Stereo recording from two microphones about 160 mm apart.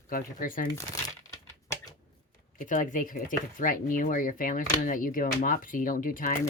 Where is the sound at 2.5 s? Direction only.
55° left (ahead or behind).